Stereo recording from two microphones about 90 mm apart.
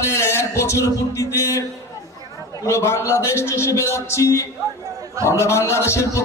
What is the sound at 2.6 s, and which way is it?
A man's voice, 30° left (ahead or behind).